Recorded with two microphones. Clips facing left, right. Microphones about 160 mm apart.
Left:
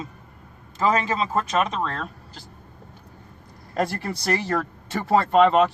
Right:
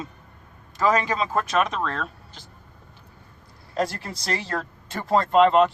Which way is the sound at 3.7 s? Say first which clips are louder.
Left 1 dB; 60° left (ahead or behind).